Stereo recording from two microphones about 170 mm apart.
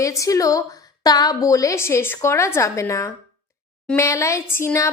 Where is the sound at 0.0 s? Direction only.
20° left (ahead or behind).